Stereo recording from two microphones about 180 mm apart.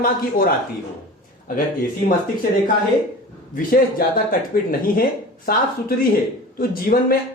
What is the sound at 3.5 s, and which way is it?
Speech, 50° left (ahead or behind).